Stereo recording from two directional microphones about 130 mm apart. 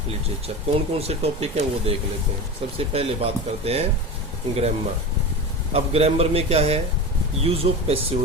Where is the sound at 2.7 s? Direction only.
50° right (ahead or behind).